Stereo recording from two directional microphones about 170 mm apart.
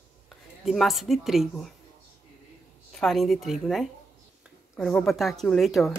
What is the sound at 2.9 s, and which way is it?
Speech, centre (ahead or behind).